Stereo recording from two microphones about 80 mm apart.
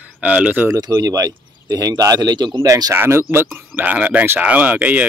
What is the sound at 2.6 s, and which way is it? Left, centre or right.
Speech, right.